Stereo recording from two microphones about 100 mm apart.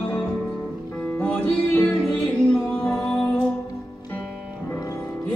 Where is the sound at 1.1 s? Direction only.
15° left (ahead or behind).